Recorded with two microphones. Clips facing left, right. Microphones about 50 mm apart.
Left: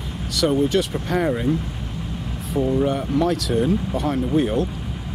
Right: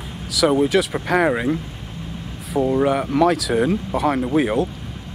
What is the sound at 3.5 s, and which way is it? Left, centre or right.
Speech, right.